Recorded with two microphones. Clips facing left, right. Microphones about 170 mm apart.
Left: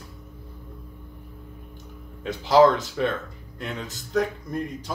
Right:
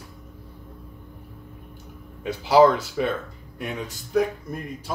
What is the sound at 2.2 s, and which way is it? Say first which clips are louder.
Speech: right 1 dB; 10° right (ahead or behind).